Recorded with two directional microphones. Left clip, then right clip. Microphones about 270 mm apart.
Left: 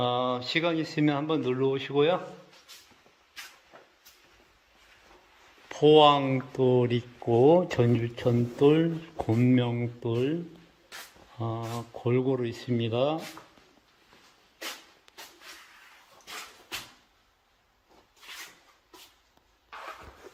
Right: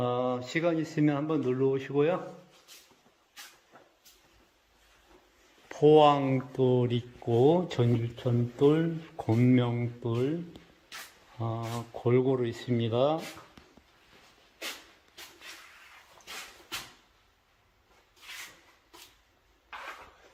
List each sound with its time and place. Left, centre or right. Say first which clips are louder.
0.0 s speech: left 2 dB; centre
5.6 s speech: left 2 dB; centre
11.3 s speech: left 1 dB; centre